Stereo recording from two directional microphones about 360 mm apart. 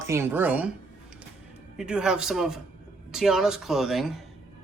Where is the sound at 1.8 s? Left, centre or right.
Centre.